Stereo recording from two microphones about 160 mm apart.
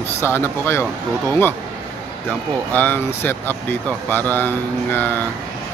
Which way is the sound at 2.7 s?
10° left (ahead or behind).